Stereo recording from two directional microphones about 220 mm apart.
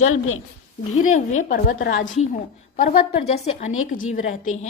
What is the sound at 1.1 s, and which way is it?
Speech, 35° left (ahead or behind).